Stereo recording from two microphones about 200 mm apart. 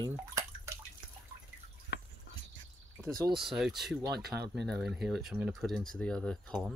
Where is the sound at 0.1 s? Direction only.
15° right (ahead or behind).